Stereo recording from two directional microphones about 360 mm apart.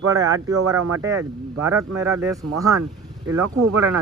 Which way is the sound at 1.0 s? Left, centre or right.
Centre.